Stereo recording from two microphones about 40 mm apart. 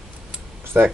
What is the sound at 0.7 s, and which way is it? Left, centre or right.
Speech, right.